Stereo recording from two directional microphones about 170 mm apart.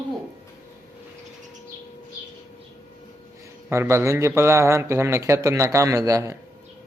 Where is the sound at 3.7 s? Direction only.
15° right (ahead or behind).